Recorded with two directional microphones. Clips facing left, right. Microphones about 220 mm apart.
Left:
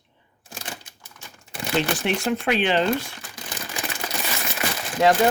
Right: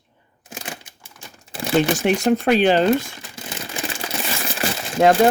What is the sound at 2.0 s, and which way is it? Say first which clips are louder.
Speech: right 6 dB; 40° right (ahead or behind).